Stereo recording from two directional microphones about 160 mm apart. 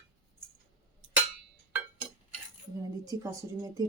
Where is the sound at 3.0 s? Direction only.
20° right (ahead or behind).